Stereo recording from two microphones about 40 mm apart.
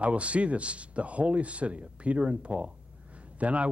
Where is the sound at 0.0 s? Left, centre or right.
Right.